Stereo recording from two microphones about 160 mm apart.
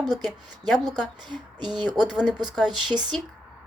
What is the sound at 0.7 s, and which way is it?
Speech, centre (ahead or behind).